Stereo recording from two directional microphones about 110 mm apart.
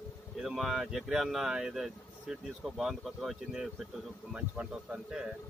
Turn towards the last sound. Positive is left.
turn(degrees=-10)  # may be behind; listen again after turning